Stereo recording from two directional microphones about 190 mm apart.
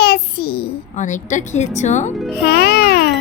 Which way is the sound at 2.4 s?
55° left (ahead or behind).